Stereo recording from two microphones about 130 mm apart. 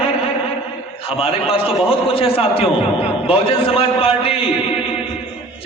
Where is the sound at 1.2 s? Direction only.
45° left (ahead or behind).